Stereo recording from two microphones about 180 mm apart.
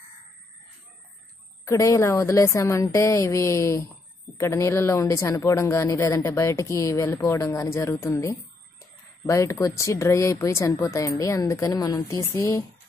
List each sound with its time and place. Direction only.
1.6 s a woman's voice: 15° left (ahead or behind)